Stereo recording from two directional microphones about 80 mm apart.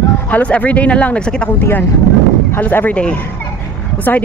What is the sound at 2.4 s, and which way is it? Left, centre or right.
Speech, left.